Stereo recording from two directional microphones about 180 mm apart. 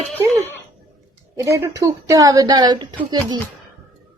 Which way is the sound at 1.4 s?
15° right (ahead or behind).